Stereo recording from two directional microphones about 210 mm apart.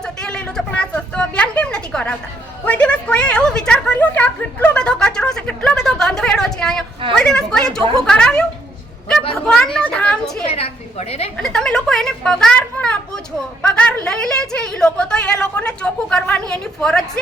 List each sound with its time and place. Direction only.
0.0 s a sound: 5° left (ahead or behind)
2.6 s a woman's voice: 5° left (ahead or behind)
9.7 s a woman's voice: 5° left (ahead or behind)
10.5 s a woman's voice: 30° left (ahead or behind)
11.3 s a woman's voice: 5° left (ahead or behind)